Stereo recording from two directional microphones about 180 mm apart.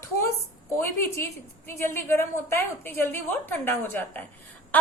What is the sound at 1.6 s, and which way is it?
A woman's voice, 15° left (ahead or behind).